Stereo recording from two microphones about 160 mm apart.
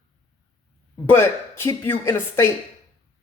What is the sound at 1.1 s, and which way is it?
A man's voice, 15° left (ahead or behind).